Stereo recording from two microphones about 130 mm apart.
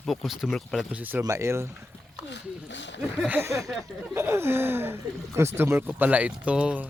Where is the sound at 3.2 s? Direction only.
15° right (ahead or behind).